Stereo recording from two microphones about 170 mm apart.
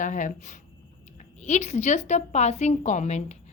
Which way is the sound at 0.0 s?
50° left (ahead or behind).